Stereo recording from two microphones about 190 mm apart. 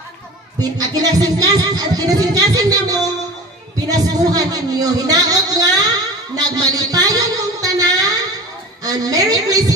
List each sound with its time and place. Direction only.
0.6 s speech: 20° right (ahead or behind)
4.2 s speech: 20° right (ahead or behind)